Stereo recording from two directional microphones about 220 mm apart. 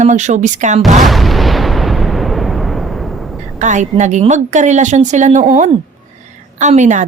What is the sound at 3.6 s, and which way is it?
A woman's voice, 35° right (ahead or behind).